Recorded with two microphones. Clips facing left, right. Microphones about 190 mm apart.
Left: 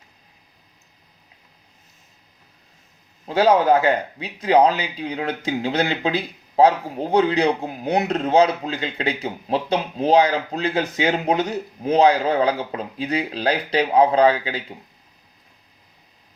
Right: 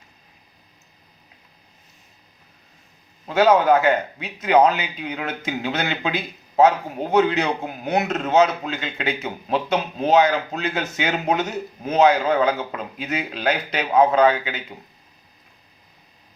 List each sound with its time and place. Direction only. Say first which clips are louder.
3.2 s speech: even; 35° left (ahead or behind)